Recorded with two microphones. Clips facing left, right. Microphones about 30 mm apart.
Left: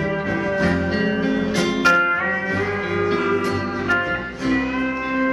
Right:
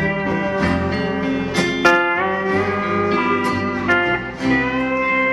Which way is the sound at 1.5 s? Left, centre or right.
Right.